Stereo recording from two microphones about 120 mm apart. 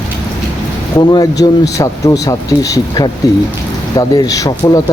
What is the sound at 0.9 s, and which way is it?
Speech, 30° left (ahead or behind).